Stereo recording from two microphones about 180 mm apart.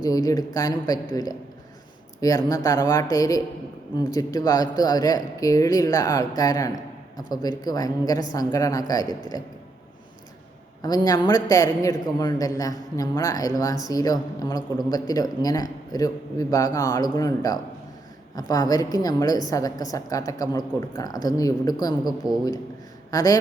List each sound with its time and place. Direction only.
0.0 s speech: 20° left (ahead or behind)
10.8 s speech: 20° left (ahead or behind)
23.1 s speech: 20° left (ahead or behind)